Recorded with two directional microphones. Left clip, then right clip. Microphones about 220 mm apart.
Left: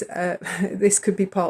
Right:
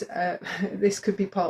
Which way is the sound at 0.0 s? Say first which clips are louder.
Left 2 dB; 55° left (ahead or behind).